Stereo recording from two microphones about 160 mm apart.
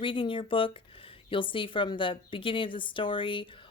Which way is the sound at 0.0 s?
30° left (ahead or behind).